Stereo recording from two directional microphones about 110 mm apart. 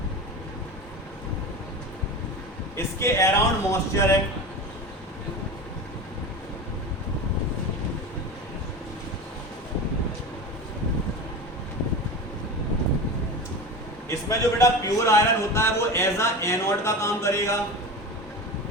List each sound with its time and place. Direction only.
2.7 s a man's voice: 25° left (ahead or behind)
14.1 s a man's voice: 30° left (ahead or behind)